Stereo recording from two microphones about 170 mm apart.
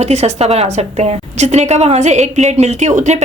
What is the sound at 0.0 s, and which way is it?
A woman's voice, 40° right (ahead or behind).